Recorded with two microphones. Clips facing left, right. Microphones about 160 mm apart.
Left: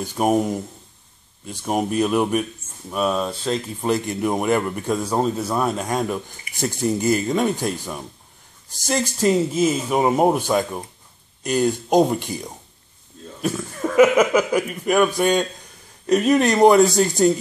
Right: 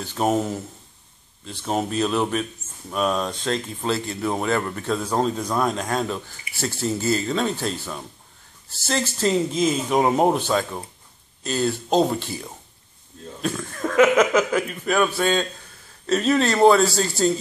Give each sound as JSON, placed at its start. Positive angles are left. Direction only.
{"t": 0.0, "sound": "a man's voice", "side_deg": 10}
{"t": 3.9, "sound": "a man's voice", "side_deg": 15}